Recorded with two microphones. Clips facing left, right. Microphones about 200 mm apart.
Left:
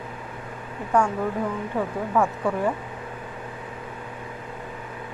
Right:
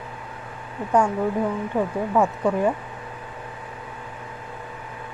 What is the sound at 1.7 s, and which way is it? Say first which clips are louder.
Speech: right 2 dB; 20° right (ahead or behind).